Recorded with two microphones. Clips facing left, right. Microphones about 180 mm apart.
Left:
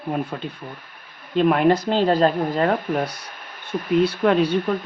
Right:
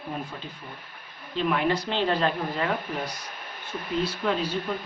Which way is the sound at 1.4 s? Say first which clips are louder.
Left 8 dB; 50° left (ahead or behind).